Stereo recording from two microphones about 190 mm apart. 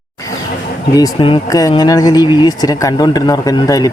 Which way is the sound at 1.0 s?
25° left (ahead or behind).